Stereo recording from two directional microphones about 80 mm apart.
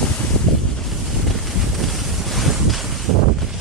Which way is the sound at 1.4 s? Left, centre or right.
Centre.